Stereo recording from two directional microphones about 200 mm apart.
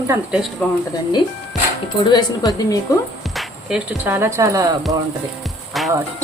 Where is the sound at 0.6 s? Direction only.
5° left (ahead or behind).